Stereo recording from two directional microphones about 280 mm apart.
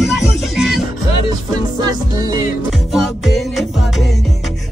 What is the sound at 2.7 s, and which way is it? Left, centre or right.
Music, centre.